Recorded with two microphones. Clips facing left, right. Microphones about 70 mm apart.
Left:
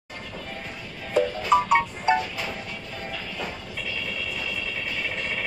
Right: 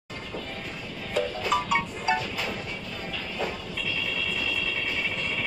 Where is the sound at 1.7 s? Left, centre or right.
Left.